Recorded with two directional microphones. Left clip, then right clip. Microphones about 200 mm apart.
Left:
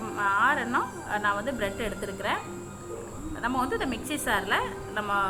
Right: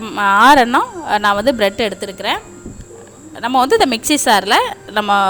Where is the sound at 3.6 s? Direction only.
60° right (ahead or behind).